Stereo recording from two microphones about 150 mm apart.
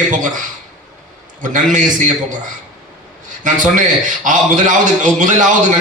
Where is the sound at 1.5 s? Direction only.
60° right (ahead or behind).